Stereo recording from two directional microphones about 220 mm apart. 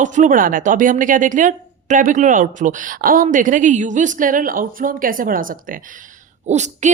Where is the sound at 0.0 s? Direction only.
35° right (ahead or behind).